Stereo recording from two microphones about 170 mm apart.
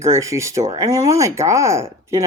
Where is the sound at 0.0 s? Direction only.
20° right (ahead or behind).